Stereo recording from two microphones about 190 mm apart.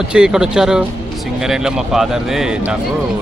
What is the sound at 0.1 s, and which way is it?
Speech, 5° right (ahead or behind).